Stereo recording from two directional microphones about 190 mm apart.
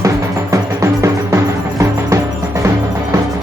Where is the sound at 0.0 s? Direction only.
15° right (ahead or behind).